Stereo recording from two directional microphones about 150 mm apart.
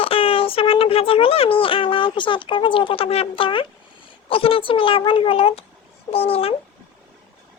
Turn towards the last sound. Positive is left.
turn(degrees=40)  # may be behind; listen again after turning